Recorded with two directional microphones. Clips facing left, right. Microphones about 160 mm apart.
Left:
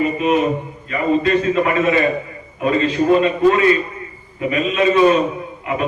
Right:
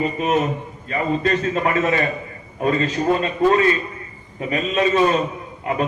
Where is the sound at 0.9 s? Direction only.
40° right (ahead or behind).